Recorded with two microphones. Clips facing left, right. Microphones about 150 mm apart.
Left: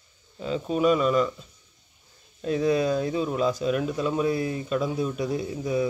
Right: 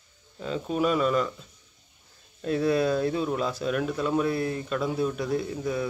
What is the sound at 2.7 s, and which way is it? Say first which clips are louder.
Speech: even; centre (ahead or behind).